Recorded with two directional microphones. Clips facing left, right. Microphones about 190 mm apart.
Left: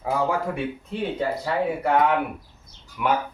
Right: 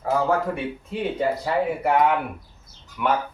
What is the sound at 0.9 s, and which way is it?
Speech, 10° right (ahead or behind).